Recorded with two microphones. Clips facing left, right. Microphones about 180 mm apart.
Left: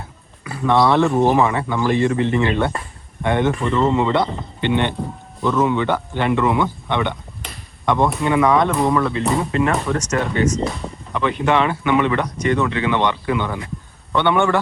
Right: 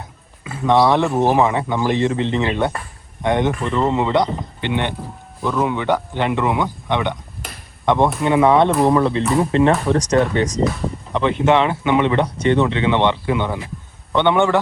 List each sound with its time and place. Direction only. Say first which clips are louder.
0.4 s speech: right 1 dB; 20° right (ahead or behind); by 10.6 s 35° right (ahead or behind)
11.1 s speech: right 2 dB; 25° right (ahead or behind)